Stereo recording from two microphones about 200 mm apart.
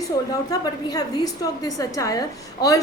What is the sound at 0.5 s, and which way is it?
A woman's voice, 20° left (ahead or behind).